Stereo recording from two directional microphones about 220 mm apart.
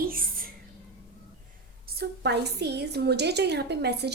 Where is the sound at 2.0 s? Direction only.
50° right (ahead or behind).